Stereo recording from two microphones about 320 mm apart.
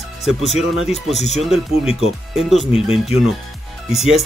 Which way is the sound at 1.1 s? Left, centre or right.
Left.